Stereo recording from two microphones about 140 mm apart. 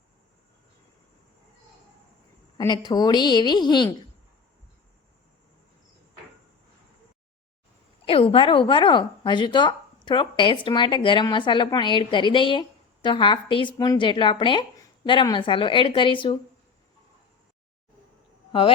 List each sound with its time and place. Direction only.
2.6 s speech: 30° left (ahead or behind)
8.0 s speech: 40° left (ahead or behind)
13.7 s speech: 25° left (ahead or behind)